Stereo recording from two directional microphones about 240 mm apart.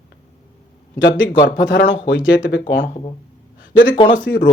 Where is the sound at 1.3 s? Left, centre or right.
Left.